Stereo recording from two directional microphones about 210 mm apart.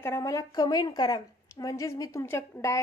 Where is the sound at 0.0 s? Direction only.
15° left (ahead or behind).